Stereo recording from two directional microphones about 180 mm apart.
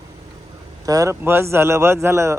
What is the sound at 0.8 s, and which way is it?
Speech, 20° right (ahead or behind).